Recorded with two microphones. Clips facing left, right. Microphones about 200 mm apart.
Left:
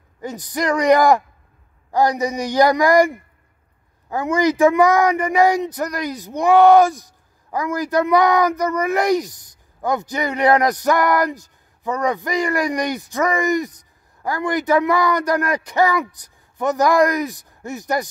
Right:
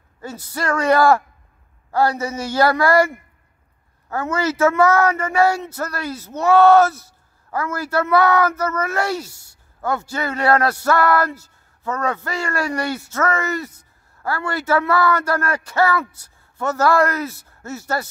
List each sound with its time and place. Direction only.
0.2 s speech: 15° left (ahead or behind)